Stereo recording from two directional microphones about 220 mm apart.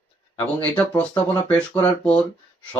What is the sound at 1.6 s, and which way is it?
Speech, 5° left (ahead or behind).